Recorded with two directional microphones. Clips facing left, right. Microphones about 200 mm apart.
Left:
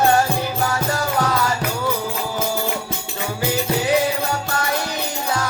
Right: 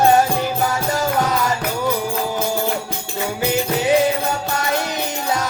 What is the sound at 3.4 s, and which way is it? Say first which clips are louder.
Music: right 1 dB; 20° right (ahead or behind).